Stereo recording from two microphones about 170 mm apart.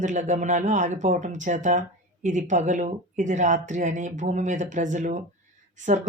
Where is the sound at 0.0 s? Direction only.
45° right (ahead or behind).